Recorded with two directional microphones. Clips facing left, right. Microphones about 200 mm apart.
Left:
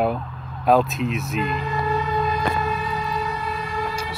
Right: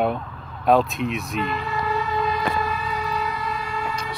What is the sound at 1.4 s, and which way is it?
Speech, 40° left (ahead or behind).